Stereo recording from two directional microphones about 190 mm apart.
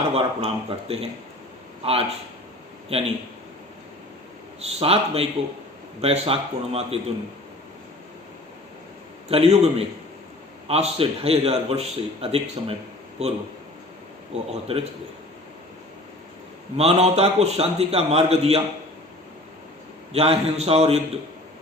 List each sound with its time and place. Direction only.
0.1 s a man's voice: 30° right (ahead or behind)
4.6 s a man's voice: 30° right (ahead or behind)
9.3 s a man's voice: 30° right (ahead or behind)
14.7 s a man's voice: 30° right (ahead or behind)
16.7 s a man's voice: 30° right (ahead or behind)
20.1 s a man's voice: 30° right (ahead or behind)